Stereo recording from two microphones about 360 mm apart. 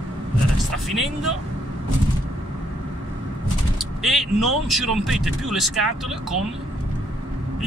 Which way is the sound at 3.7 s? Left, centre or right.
Centre.